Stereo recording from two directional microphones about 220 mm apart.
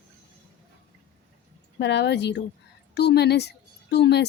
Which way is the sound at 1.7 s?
50° left (ahead or behind).